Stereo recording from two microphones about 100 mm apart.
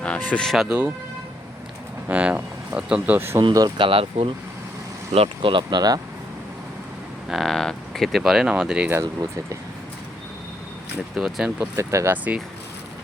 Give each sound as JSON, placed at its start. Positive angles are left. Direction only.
{"t": 0.0, "sound": "speech", "side_deg": 10}
{"t": 0.5, "sound": "speech", "side_deg": -5}
{"t": 2.0, "sound": "speech", "side_deg": -15}
{"t": 3.2, "sound": "speech", "side_deg": -25}
{"t": 3.5, "sound": "speech", "side_deg": -40}
{"t": 3.8, "sound": "speech", "side_deg": -60}
{"t": 7.3, "sound": "speech", "side_deg": 0}
{"t": 8.9, "sound": "speech", "side_deg": -30}
{"t": 11.1, "sound": "speech", "side_deg": -5}
{"t": 11.6, "sound": "speech", "side_deg": -30}
{"t": 12.1, "sound": "speech", "side_deg": -15}